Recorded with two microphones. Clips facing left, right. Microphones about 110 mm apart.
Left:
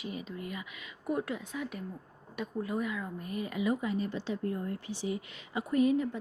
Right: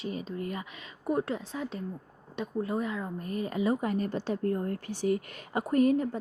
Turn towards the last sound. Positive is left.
turn(degrees=-45)  # may be behind; listen again after turning